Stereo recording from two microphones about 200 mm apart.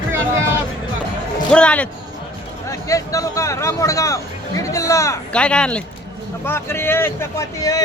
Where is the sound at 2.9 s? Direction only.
15° left (ahead or behind).